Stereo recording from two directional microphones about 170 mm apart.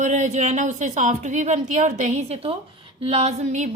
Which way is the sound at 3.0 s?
35° right (ahead or behind).